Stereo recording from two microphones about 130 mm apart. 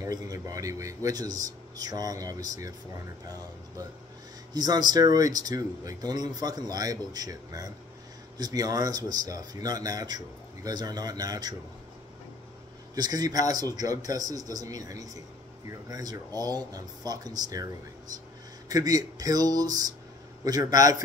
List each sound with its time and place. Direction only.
0.0 s speech: 25° right (ahead or behind)
4.6 s speech: 30° right (ahead or behind)
12.9 s speech: 30° right (ahead or behind)
18.7 s speech: 30° right (ahead or behind)